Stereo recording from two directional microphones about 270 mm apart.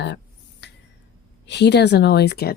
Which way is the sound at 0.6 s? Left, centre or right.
Left.